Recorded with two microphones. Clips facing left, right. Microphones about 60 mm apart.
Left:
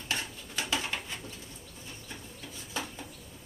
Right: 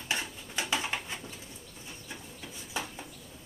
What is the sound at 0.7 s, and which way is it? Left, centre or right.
Pigeon, centre.